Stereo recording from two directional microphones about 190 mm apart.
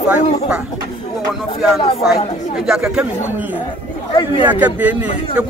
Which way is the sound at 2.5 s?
Centre (ahead or behind).